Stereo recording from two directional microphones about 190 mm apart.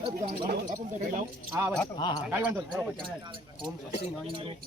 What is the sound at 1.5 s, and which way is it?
Music, 10° right (ahead or behind).